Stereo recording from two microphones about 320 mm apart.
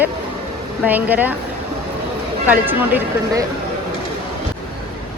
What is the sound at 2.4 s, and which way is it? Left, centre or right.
Speech, centre.